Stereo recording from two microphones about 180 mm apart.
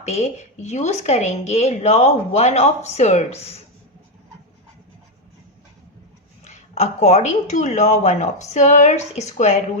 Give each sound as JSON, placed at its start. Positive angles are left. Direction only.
{"t": 0.0, "sound": "a woman's voice", "side_deg": 40}
{"t": 6.4, "sound": "a woman's voice", "side_deg": 40}